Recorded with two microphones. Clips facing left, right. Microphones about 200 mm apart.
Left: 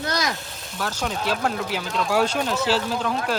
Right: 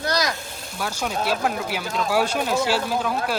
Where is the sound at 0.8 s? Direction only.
10° right (ahead or behind).